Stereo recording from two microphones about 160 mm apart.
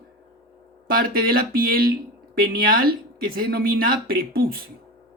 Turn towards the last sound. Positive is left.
turn(degrees=-70)  # may be behind; listen again after turning